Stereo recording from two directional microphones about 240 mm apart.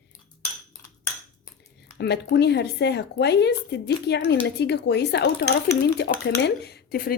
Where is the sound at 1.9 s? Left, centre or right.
Left.